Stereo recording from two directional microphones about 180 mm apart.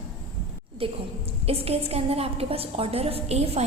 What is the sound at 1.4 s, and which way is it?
A woman's voice, 35° right (ahead or behind).